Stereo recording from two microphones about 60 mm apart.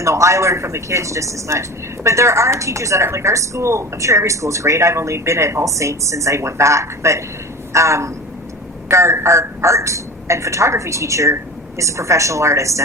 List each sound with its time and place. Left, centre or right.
0.0 s a woman's voice: right